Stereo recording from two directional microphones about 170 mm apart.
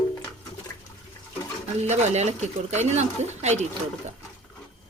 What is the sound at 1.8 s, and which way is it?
A woman's voice, 40° right (ahead or behind).